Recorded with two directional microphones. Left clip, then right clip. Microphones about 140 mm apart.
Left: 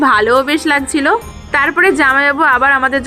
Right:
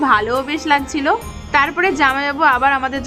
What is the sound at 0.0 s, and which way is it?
A woman's voice, 25° left (ahead or behind).